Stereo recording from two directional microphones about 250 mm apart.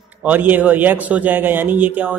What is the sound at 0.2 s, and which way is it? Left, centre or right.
A man's voice, centre.